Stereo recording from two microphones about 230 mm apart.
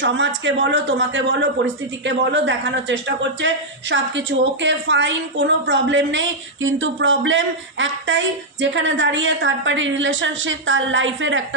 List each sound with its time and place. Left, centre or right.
0.0 s a woman's voice: right